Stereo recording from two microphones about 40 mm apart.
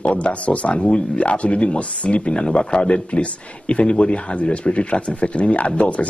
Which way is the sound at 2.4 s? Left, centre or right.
Centre.